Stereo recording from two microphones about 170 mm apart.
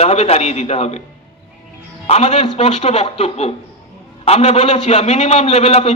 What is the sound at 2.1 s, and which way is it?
A man's voice, 35° left (ahead or behind).